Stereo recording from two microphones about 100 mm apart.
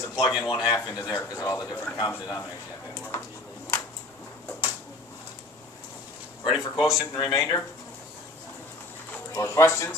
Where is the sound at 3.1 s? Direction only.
25° left (ahead or behind).